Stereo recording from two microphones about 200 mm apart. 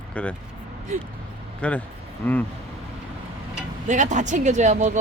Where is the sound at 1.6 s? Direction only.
5° left (ahead or behind).